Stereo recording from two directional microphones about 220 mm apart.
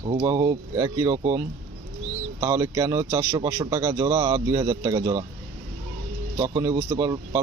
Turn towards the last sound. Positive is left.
turn(degrees=-15)  # may be behind; listen again after turning